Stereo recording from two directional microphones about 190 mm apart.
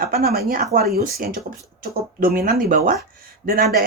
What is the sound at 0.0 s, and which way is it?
Speech, 50° right (ahead or behind).